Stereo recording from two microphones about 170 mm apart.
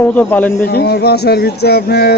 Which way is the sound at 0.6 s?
70° left (ahead or behind).